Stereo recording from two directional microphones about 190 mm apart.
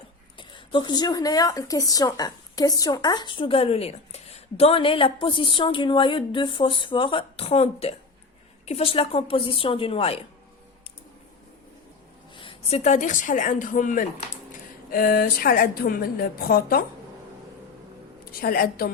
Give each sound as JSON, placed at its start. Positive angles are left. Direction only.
{"t": 0.3, "sound": "speech", "side_deg": 25}
{"t": 12.4, "sound": "a woman's voice", "side_deg": 30}
{"t": 18.3, "sound": "a woman's voice", "side_deg": 50}